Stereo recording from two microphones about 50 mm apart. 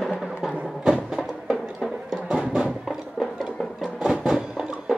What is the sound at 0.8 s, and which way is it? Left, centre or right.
Music, centre.